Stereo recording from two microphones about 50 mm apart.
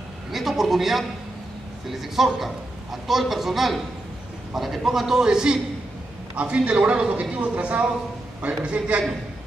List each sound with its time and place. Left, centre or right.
0.3 s a man's voice: centre
6.3 s a man's voice: right